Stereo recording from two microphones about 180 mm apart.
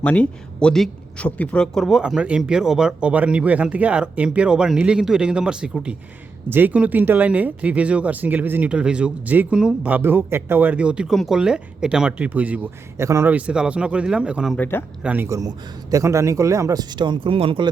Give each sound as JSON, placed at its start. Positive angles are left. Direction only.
{"t": 0.0, "sound": "speech", "side_deg": 5}
{"t": 14.5, "sound": "speech", "side_deg": 10}
{"t": 15.0, "sound": "speech", "side_deg": -10}